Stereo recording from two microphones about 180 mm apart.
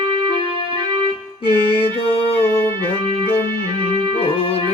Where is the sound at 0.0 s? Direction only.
30° right (ahead or behind).